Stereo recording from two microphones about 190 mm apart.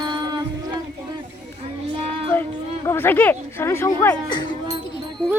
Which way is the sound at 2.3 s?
10° left (ahead or behind).